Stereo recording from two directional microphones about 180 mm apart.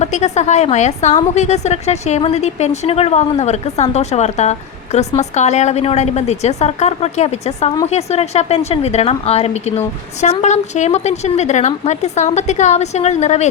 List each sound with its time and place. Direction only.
0.0 s a woman's voice: 40° left (ahead or behind)